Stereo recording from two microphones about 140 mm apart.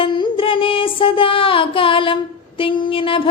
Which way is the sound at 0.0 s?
40° left (ahead or behind).